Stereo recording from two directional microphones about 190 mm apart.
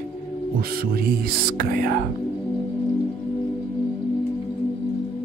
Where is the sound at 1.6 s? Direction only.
50° right (ahead or behind).